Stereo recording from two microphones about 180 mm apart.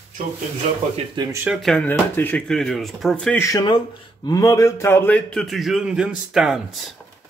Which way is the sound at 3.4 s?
20° left (ahead or behind).